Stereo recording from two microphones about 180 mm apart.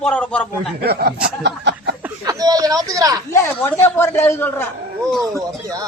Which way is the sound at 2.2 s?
20° right (ahead or behind).